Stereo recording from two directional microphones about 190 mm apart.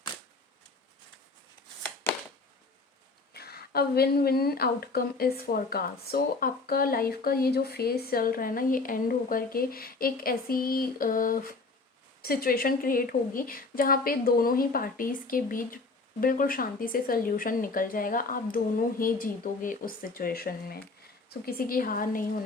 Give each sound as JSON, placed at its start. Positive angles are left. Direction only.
{"t": 3.3, "sound": "a woman's voice", "side_deg": 55}